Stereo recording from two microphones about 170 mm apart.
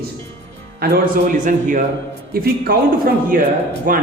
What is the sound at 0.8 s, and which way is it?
A man's voice, 60° right (ahead or behind).